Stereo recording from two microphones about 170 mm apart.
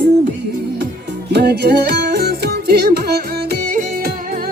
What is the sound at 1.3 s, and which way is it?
Music, 75° right (ahead or behind).